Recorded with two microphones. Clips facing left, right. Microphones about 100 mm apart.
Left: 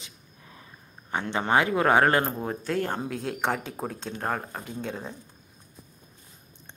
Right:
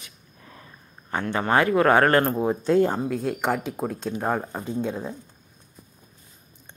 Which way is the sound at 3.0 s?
Centre (ahead or behind).